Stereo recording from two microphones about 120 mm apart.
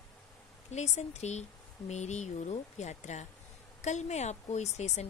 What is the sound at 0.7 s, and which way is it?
Speech, 70° left (ahead or behind).